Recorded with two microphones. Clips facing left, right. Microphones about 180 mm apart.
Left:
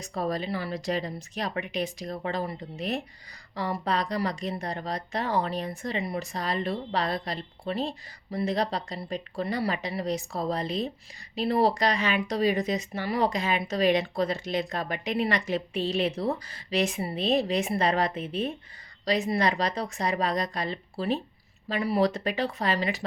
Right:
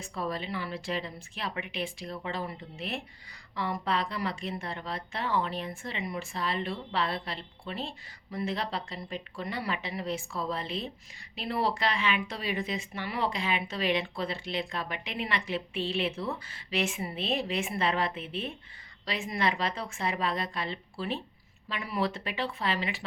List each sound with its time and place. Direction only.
0.0 s speech: 40° left (ahead or behind)